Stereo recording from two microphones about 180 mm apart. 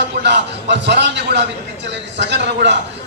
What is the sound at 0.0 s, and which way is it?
A man's voice, 75° right (ahead or behind).